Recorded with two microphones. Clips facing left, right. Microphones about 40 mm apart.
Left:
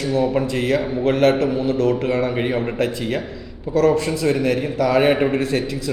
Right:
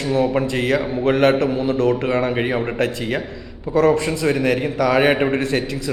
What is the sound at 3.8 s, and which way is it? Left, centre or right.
A man's voice, centre.